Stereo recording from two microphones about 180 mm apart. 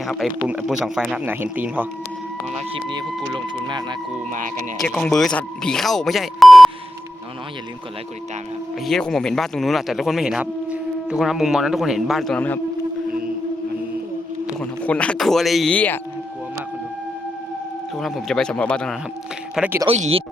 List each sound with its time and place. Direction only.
0.0 s a man's voice: centre (ahead or behind)
2.6 s speech: 30° right (ahead or behind)
4.3 s speech: 45° right (ahead or behind)
4.8 s speech: 5° left (ahead or behind)
8.9 s speech: 5° left (ahead or behind)
14.6 s speech: 5° left (ahead or behind)
17.9 s speech: centre (ahead or behind)
19.5 s speech: 10° right (ahead or behind)
19.9 s speech: 35° right (ahead or behind)